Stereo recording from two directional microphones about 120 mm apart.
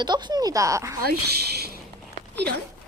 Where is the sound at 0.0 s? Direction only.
35° right (ahead or behind).